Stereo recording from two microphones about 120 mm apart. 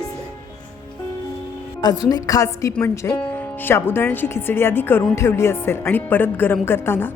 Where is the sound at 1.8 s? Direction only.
35° left (ahead or behind).